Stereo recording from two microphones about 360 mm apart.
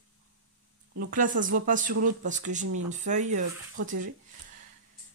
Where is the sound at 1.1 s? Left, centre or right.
Right.